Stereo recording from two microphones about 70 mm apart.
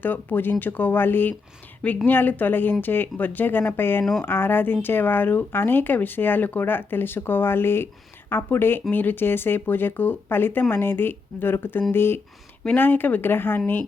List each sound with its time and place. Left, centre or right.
0.0 s speech: left